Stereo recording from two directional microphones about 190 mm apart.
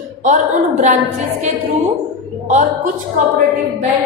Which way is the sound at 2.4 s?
40° right (ahead or behind).